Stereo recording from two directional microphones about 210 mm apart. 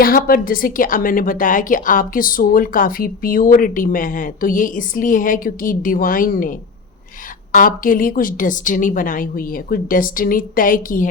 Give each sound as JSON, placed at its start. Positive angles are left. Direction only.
{"t": 0.0, "sound": "a woman's voice", "side_deg": 45}
{"t": 7.5, "sound": "a woman's voice", "side_deg": 40}